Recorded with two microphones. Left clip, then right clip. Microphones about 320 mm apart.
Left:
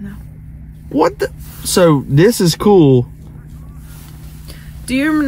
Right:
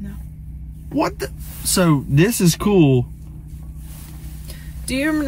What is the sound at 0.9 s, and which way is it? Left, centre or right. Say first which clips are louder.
Speech: left 7 dB; centre.